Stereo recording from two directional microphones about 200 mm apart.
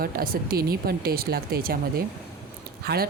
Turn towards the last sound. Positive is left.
turn(degrees=-50)  # may be behind; listen again after turning